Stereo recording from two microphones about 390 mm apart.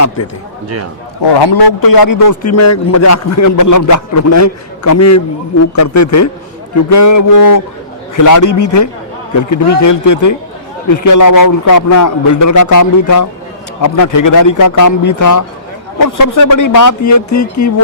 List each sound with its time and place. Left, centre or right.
1.2 s a man's voice: left